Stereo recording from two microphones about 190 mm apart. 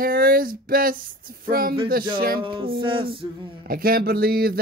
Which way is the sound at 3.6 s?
50° right (ahead or behind).